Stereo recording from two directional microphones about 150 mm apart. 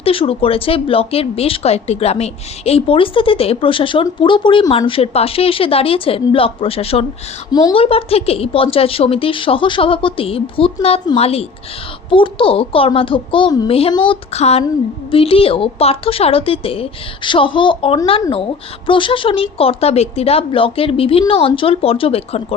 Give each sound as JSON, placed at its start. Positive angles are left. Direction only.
{"t": 0.0, "sound": "speech", "side_deg": 40}